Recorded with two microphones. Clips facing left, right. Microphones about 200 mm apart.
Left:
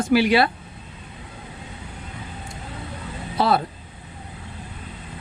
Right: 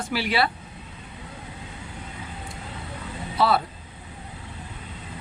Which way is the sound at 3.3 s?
45° left (ahead or behind).